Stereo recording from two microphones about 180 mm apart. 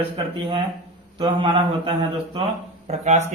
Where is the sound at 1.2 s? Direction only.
30° right (ahead or behind).